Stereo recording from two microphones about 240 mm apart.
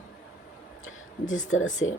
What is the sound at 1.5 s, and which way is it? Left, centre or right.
Speech, left.